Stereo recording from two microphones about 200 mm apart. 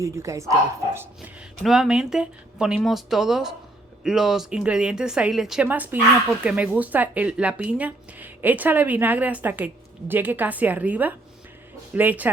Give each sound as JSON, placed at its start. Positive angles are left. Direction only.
{"t": 0.0, "sound": "a woman's voice", "side_deg": -15}